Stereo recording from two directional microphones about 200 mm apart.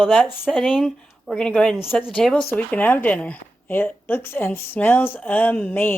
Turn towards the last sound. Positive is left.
turn(degrees=10)  # may be behind; listen again after turning